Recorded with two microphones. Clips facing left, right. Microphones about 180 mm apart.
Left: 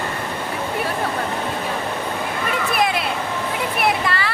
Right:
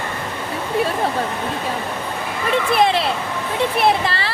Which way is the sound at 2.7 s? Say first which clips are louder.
Right 4 dB; 30° right (ahead or behind).